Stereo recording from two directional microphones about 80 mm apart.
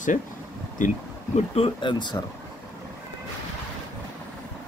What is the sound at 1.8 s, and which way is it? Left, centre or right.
Speech, left.